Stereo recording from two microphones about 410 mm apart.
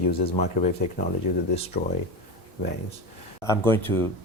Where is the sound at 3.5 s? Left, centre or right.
Centre.